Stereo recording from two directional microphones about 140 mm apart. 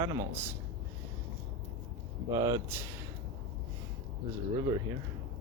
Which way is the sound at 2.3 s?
25° right (ahead or behind).